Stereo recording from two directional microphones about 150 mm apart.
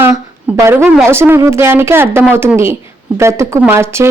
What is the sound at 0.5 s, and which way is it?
Speech, 20° right (ahead or behind).